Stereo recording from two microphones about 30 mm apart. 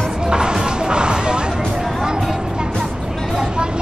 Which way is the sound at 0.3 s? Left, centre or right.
Right.